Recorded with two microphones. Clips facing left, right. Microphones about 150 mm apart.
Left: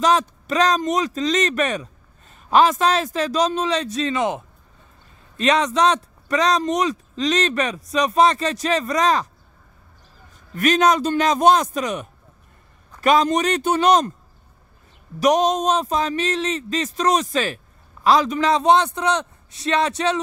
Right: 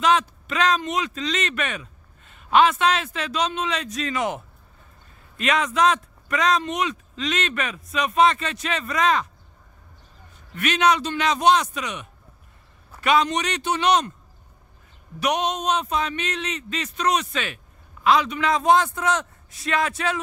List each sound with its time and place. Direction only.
0.0 s speech: 35° left (ahead or behind)
5.4 s speech: 30° left (ahead or behind)
10.5 s a man's voice: 40° left (ahead or behind)
15.1 s a man's voice: 40° left (ahead or behind)